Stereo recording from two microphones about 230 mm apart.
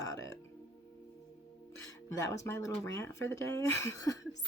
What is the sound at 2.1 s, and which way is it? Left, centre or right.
Speech, centre.